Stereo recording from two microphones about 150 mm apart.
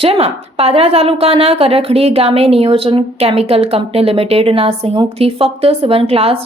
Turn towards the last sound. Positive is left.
turn(degrees=-40)  # may be behind; listen again after turning